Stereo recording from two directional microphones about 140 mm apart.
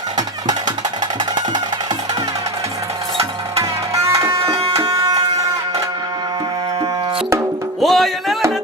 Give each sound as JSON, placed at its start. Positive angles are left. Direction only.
{"t": 1.2, "sound": "music", "side_deg": -30}
{"t": 3.6, "sound": "music", "side_deg": -20}
{"t": 7.8, "sound": "music", "side_deg": 0}